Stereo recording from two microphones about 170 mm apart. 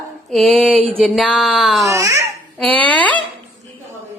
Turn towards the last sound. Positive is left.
turn(degrees=10)  # may be behind; listen again after turning